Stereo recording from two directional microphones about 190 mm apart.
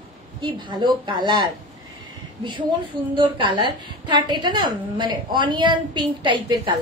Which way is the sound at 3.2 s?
25° right (ahead or behind).